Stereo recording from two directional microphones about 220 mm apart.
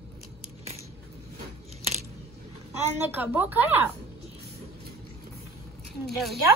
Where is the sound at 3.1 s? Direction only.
10° right (ahead or behind).